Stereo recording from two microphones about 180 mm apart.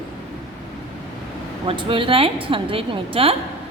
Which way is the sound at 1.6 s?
30° right (ahead or behind).